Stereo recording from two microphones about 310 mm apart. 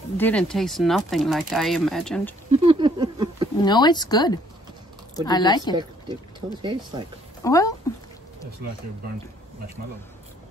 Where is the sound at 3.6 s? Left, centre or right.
Centre.